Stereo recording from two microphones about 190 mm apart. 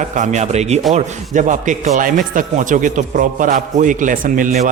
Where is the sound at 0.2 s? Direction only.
40° right (ahead or behind).